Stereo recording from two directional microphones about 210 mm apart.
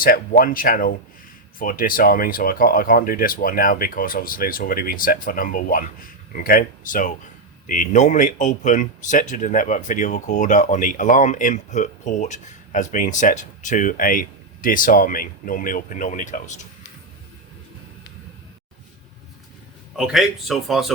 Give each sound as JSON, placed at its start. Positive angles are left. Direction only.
{"t": 0.0, "sound": "speech", "side_deg": 45}
{"t": 20.0, "sound": "speech", "side_deg": 0}